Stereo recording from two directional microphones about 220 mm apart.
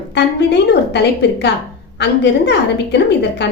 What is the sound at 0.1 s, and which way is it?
A woman's voice, 50° left (ahead or behind).